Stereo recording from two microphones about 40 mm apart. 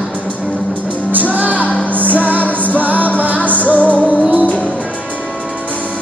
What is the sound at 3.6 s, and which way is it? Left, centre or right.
Music, left.